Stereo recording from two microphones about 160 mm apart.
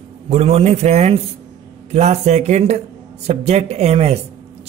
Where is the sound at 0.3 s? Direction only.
40° right (ahead or behind).